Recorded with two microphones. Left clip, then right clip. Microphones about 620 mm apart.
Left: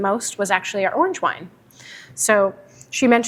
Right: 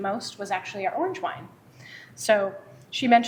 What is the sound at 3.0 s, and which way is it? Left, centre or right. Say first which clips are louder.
Speech: left 3 dB; left.